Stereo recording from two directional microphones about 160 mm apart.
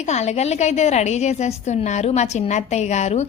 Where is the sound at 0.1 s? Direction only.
45° left (ahead or behind).